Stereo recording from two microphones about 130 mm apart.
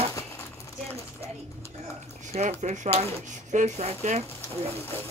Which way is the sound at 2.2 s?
60° right (ahead or behind).